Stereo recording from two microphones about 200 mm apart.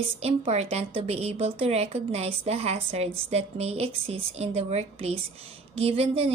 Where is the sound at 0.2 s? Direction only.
30° right (ahead or behind).